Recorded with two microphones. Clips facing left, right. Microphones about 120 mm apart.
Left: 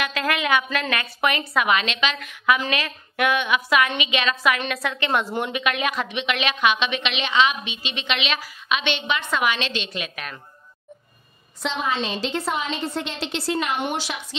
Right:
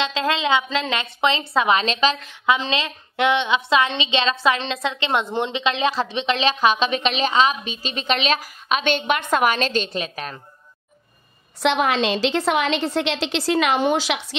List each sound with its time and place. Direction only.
0.0 s a woman's voice: 25° right (ahead or behind)
11.6 s a woman's voice: 75° right (ahead or behind); by 14.2 s 90° right